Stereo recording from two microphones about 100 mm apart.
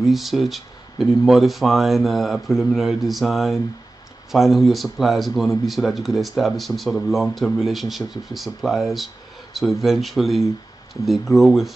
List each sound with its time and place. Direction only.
0.0 s speech: centre (ahead or behind)